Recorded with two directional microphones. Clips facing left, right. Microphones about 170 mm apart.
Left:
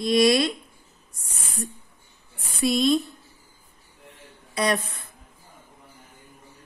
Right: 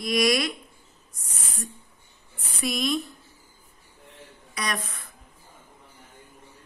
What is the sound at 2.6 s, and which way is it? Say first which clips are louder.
Speech: left 6 dB; 30° left (ahead or behind).